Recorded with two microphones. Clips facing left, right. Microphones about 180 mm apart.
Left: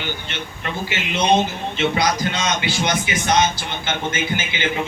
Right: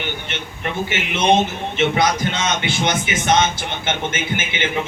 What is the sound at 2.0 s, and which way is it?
Speech, 25° right (ahead or behind).